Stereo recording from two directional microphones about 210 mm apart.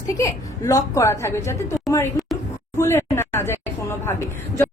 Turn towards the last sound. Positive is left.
turn(degrees=10)  # may be behind; listen again after turning